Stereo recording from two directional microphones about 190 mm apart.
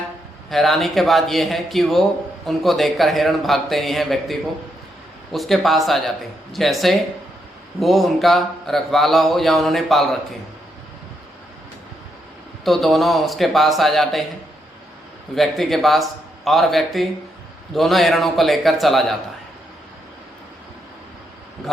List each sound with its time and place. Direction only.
0.5 s speech: centre (ahead or behind)
12.6 s speech: centre (ahead or behind)
15.4 s speech: centre (ahead or behind)